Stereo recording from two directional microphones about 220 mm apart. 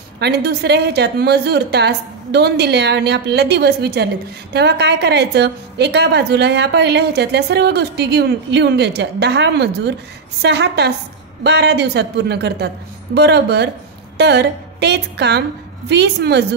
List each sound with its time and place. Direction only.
0.2 s a woman's voice: 50° right (ahead or behind)